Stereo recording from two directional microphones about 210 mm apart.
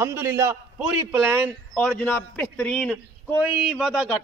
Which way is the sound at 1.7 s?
10° left (ahead or behind).